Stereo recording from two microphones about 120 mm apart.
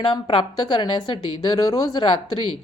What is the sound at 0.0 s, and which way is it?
A woman's voice, 45° left (ahead or behind).